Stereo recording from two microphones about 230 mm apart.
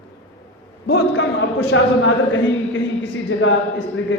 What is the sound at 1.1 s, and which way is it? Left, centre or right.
Speech, left.